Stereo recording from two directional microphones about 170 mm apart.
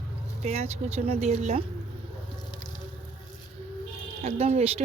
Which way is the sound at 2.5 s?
25° left (ahead or behind).